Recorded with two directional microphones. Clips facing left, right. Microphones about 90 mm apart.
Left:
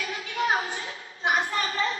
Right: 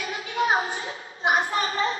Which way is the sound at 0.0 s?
30° right (ahead or behind).